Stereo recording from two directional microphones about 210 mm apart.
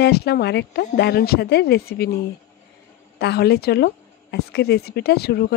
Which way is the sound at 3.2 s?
50° left (ahead or behind).